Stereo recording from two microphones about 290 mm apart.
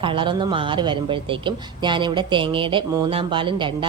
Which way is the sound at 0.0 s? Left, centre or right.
Centre.